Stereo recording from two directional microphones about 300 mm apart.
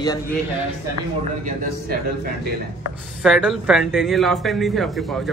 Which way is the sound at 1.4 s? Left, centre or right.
Right.